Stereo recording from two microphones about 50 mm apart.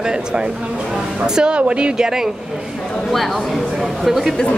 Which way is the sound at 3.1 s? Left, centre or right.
Centre.